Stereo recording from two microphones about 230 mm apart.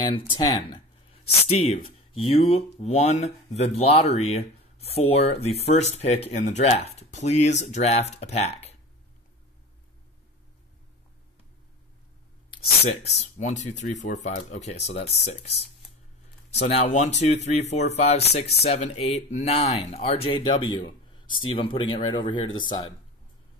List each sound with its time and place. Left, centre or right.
0.0 s speech: left
12.8 s speech: left
16.5 s speech: left